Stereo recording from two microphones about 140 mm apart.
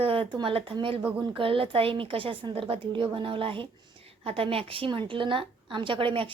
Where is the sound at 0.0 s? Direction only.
40° right (ahead or behind).